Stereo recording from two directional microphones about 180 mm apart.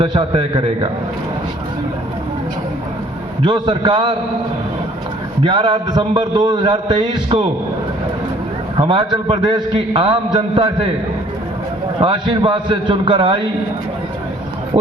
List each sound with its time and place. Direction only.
0.0 s a man's voice: 30° right (ahead or behind)
3.4 s a man's voice: 25° right (ahead or behind)
5.4 s a man's voice: 30° right (ahead or behind)
8.8 s a man's voice: 30° right (ahead or behind)
11.9 s a man's voice: 25° right (ahead or behind)